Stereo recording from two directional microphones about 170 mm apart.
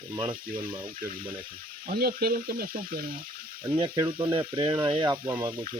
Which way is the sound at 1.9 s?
65° right (ahead or behind).